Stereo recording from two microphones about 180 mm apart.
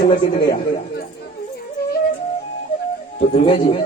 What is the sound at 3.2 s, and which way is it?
Speech, 35° left (ahead or behind).